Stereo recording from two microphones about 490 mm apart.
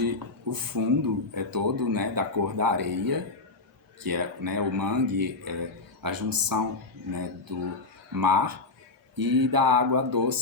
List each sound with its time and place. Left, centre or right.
0.0 s speech: right
8.1 s speech: right